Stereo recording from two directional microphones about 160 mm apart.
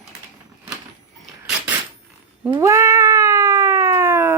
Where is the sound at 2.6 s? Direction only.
20° right (ahead or behind).